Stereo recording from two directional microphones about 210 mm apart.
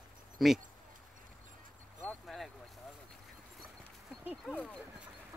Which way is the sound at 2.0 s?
5° left (ahead or behind).